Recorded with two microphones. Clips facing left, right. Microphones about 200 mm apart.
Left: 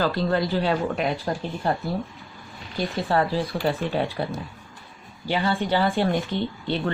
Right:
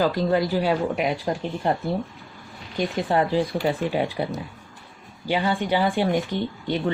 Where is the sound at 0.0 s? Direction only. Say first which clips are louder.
Right 2 dB; 15° right (ahead or behind).